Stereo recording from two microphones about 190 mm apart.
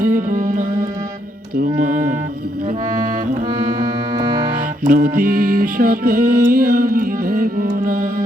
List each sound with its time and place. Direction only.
0.0 s music: 45° right (ahead or behind)
4.8 s music: 45° right (ahead or behind)